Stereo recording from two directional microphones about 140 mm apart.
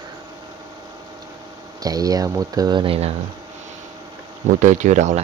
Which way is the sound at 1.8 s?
25° right (ahead or behind).